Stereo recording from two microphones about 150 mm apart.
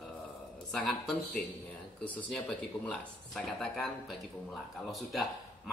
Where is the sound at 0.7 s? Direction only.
5° left (ahead or behind).